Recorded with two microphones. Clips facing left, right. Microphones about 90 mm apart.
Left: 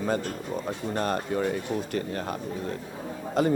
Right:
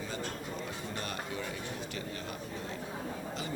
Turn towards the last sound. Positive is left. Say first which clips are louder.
# left 13 dB
turn(degrees=50)  # may be behind; listen again after turning